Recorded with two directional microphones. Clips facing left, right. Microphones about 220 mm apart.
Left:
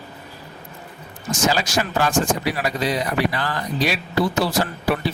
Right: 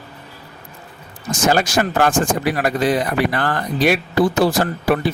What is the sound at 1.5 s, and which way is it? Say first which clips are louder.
Speech: right 7 dB; 55° right (ahead or behind).